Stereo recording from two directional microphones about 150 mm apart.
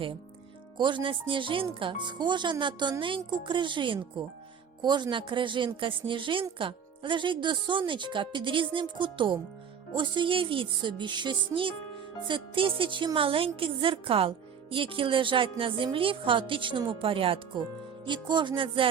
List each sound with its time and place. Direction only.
0.8 s a woman's voice: 30° right (ahead or behind)